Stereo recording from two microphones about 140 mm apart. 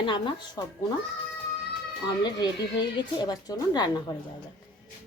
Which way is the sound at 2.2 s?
30° left (ahead or behind).